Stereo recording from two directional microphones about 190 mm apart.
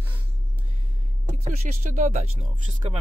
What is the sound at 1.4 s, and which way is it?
Speech, 35° right (ahead or behind).